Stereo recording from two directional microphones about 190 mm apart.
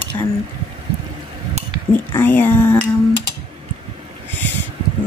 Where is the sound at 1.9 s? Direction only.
10° left (ahead or behind).